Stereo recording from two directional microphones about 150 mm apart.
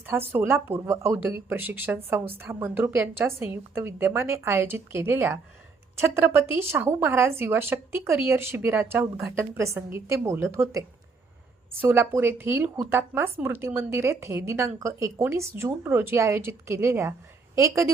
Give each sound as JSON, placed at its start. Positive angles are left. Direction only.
{"t": 0.0, "sound": "a woman's voice", "side_deg": -15}